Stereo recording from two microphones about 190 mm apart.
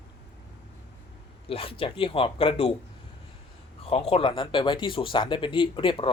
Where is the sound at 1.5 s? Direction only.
30° left (ahead or behind).